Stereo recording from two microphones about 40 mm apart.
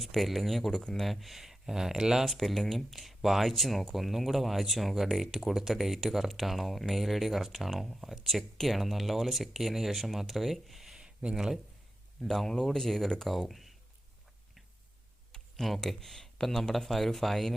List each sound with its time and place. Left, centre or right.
0.0 s speech: centre
0.7 s speech: centre
1.0 s speech: centre
2.2 s speech: centre
10.9 s a sound: right
11.3 s speech: centre
12.2 s speech: centre
15.6 s speech: centre